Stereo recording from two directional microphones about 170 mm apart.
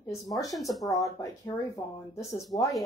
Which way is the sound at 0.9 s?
20° left (ahead or behind).